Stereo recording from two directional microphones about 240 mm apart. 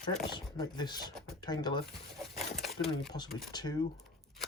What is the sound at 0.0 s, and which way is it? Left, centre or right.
Speech, centre.